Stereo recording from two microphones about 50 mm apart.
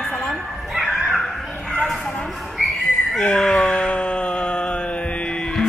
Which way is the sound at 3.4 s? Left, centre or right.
Centre.